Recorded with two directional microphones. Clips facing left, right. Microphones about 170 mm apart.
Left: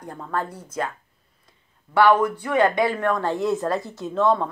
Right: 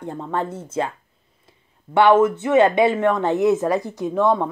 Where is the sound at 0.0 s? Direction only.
25° right (ahead or behind).